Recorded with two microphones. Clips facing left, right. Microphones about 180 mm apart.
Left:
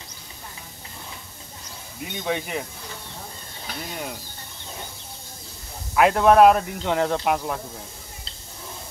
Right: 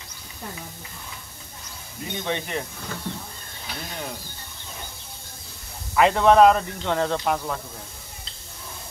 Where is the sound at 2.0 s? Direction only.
5° left (ahead or behind).